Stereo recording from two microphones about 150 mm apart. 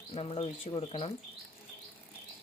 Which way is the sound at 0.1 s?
40° left (ahead or behind).